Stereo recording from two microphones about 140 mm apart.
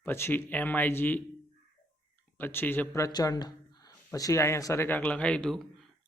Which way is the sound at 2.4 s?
15° left (ahead or behind).